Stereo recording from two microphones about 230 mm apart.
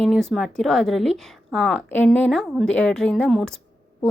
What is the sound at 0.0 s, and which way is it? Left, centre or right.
Speech, centre.